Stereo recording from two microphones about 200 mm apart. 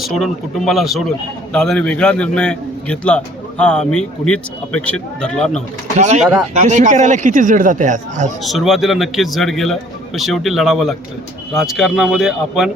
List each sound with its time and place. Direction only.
0.0 s a man's voice: centre (ahead or behind)
6.5 s speech: 35° right (ahead or behind)
8.4 s a man's voice: centre (ahead or behind)